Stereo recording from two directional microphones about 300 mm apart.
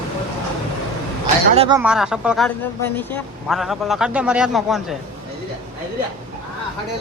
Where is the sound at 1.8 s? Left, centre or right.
Centre.